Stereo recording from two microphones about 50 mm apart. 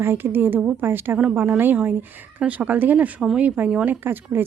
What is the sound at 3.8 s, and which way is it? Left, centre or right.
Speech, right.